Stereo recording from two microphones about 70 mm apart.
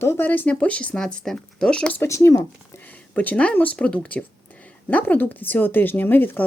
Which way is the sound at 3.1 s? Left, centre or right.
Left.